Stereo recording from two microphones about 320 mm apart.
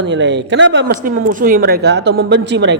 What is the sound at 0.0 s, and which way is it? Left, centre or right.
Speech, right.